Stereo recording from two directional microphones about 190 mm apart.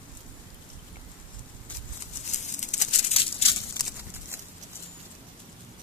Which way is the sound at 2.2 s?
40° left (ahead or behind).